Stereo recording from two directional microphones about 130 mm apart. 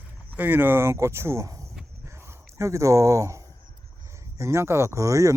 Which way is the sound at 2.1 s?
20° right (ahead or behind).